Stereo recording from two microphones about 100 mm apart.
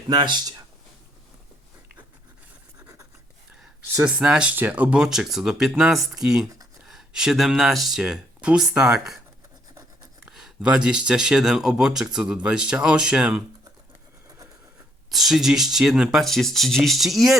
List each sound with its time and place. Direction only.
0.1 s speech: 50° right (ahead or behind)
4.0 s speech: 10° right (ahead or behind)
10.2 s speech: 10° right (ahead or behind)
15.1 s speech: centre (ahead or behind)